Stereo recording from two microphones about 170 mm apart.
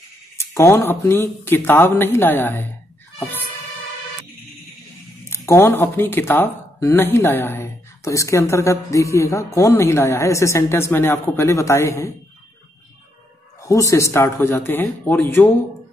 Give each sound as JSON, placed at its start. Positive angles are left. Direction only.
{"t": 0.4, "sound": "speech", "side_deg": 15}
{"t": 5.3, "sound": "speech", "side_deg": 15}
{"t": 13.6, "sound": "speech", "side_deg": 20}